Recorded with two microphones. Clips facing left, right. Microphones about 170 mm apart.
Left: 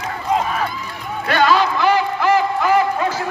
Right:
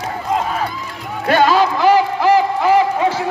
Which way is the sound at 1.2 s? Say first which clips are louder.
Right 3 dB; 40° right (ahead or behind).